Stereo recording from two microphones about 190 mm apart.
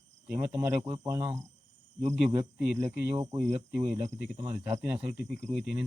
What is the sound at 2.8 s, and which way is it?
Speech, 25° right (ahead or behind).